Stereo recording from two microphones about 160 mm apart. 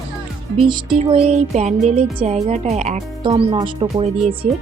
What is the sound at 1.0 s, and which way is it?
Music, 40° right (ahead or behind).